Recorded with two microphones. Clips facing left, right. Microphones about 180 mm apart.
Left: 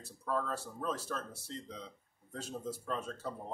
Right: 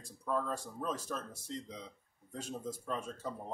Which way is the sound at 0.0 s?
10° right (ahead or behind).